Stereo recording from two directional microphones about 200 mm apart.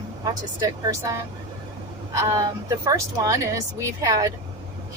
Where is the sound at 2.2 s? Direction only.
20° right (ahead or behind).